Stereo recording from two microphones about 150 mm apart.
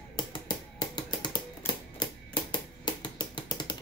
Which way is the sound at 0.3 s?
30° left (ahead or behind).